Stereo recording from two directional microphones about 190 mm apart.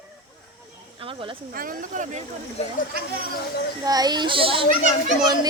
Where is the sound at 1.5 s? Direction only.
50° right (ahead or behind).